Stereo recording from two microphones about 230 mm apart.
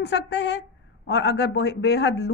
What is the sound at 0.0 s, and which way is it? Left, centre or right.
A woman's voice, left.